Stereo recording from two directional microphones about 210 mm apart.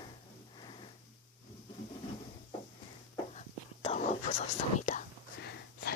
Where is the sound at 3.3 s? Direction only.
30° left (ahead or behind).